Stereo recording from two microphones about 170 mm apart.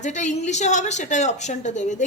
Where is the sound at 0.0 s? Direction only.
45° left (ahead or behind).